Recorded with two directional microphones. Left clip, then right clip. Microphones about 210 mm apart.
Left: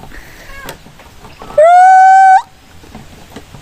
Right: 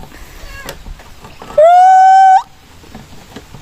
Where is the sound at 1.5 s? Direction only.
5° left (ahead or behind).